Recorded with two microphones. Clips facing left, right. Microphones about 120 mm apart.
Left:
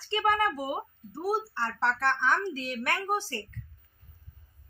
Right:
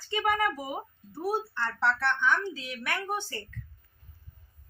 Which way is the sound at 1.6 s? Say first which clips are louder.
Even; 35° left (ahead or behind).